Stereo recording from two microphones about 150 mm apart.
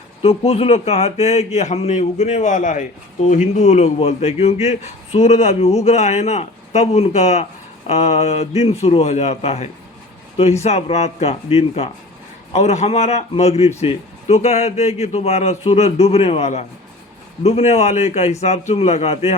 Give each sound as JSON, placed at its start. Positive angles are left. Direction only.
{"t": 0.2, "sound": "speech", "side_deg": 40}